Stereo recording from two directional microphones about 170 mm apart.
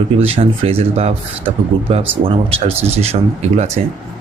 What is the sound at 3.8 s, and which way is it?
Speech, 35° right (ahead or behind).